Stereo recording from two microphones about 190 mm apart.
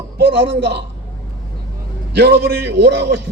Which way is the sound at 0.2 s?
65° right (ahead or behind).